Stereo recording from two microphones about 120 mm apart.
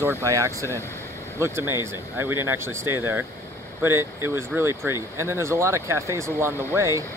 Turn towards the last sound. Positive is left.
turn(degrees=-25)  # may be behind; listen again after turning